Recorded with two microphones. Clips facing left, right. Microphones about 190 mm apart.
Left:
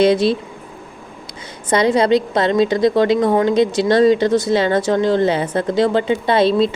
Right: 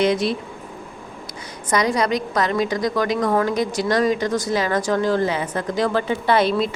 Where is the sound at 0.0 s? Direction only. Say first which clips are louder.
Left 6 dB; 30° left (ahead or behind).